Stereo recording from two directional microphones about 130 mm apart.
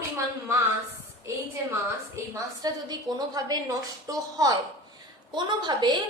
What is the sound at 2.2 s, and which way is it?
A woman's voice, 20° right (ahead or behind).